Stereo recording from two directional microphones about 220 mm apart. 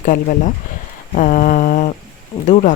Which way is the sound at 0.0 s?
35° left (ahead or behind).